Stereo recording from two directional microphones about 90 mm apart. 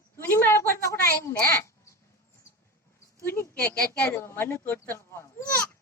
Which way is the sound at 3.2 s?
25° left (ahead or behind).